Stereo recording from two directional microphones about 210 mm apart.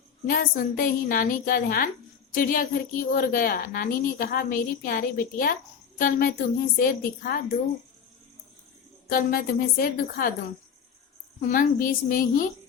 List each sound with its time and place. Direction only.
0.3 s a woman's voice: 40° left (ahead or behind)
9.0 s a woman's voice: 45° left (ahead or behind)
11.3 s a woman's voice: 40° left (ahead or behind)